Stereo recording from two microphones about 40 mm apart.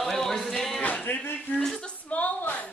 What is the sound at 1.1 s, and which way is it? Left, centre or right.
Speech, left.